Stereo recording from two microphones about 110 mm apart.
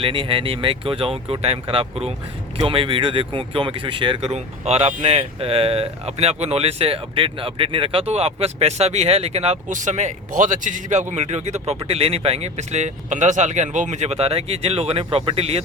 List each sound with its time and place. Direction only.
0.0 s speech: 55° right (ahead or behind)
4.2 s speech: 80° right
11.1 s speech: 90° right
11.9 s speech: 60° right (ahead or behind)